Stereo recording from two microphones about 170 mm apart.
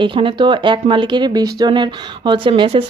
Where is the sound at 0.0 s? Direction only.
30° right (ahead or behind).